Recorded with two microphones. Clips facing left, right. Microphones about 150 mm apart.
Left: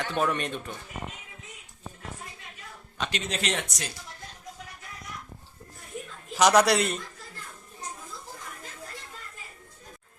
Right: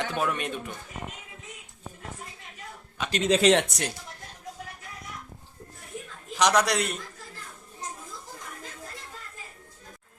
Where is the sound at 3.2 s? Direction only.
80° right; by 3.9 s 60° right (ahead or behind).